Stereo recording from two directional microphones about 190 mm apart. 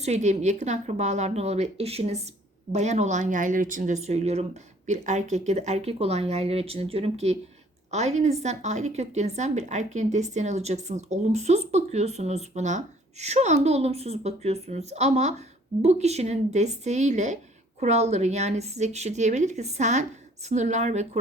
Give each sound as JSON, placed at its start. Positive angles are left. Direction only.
{"t": 0.0, "sound": "a woman's voice", "side_deg": -35}